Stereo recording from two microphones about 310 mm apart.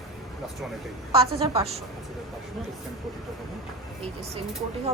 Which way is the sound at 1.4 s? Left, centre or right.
Centre.